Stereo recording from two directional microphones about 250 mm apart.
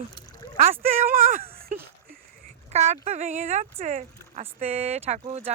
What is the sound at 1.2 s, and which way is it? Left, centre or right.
Speech, right.